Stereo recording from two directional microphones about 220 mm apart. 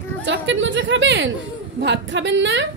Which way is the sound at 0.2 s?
55° right (ahead or behind).